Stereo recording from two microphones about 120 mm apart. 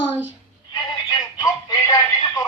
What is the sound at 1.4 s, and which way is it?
Speech, 25° left (ahead or behind).